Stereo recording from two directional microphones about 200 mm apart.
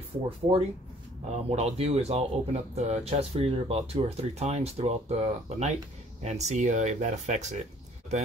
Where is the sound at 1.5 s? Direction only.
30° right (ahead or behind).